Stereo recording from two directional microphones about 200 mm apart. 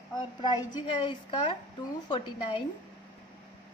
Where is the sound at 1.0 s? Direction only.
25° left (ahead or behind).